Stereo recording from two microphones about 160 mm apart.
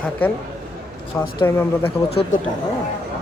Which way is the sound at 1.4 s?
15° left (ahead or behind).